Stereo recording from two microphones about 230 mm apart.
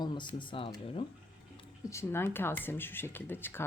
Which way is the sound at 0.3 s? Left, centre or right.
Left.